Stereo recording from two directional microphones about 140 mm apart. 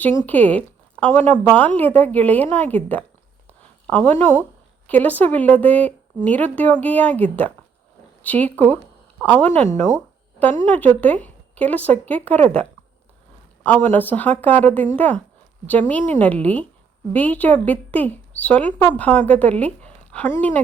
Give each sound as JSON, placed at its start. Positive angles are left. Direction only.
{"t": 0.3, "sound": "a woman's voice", "side_deg": 10}
{"t": 13.8, "sound": "a woman's voice", "side_deg": 10}